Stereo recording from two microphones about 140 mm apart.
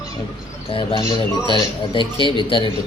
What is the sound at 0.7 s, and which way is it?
A man's voice, 40° left (ahead or behind).